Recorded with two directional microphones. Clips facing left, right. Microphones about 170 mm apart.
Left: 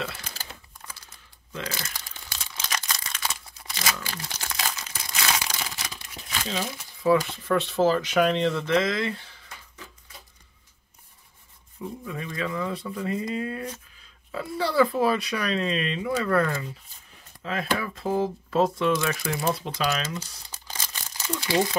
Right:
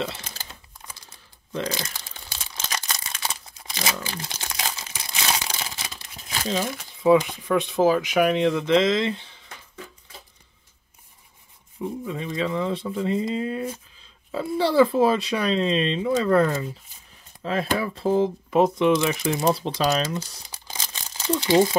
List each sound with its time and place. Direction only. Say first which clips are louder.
0.8 s typing: right 1 dB; 15° right (ahead or behind)
2.6 s crumpling: right 1 dB; 25° right (ahead or behind)
6.3 s crumpling: right 4 dB; 40° right (ahead or behind)
7.0 s speech: right 4 dB; 20° right (ahead or behind)
11.8 s speech: right 5 dB; 20° right (ahead or behind)
19.4 s speech: right 4 dB; 35° right (ahead or behind)
20.2 s crumpling: right 5 dB; 15° right (ahead or behind)
21.4 s speech: right 6 dB; 25° right (ahead or behind)